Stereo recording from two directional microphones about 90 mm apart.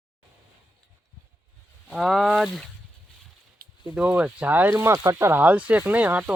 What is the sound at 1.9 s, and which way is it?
Speech, centre (ahead or behind).